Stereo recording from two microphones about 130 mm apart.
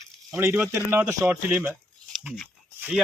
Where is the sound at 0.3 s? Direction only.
15° right (ahead or behind).